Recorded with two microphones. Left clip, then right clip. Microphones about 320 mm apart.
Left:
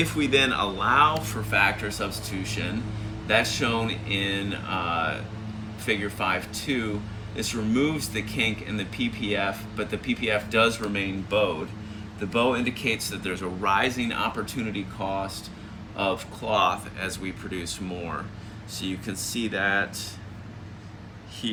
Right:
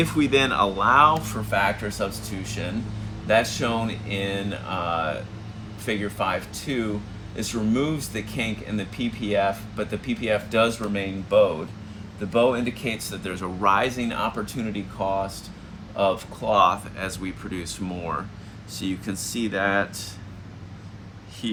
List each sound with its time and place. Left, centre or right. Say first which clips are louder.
0.0 s speech: right 1 dB; centre
21.4 s speech: right 1 dB; centre